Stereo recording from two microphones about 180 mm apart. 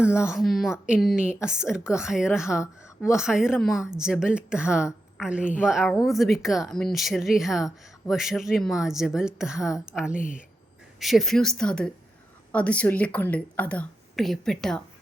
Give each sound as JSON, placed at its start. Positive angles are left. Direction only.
{"t": 0.0, "sound": "a woman's voice", "side_deg": -5}
{"t": 10.2, "sound": "speech", "side_deg": 50}
{"t": 11.0, "sound": "a woman's voice", "side_deg": 0}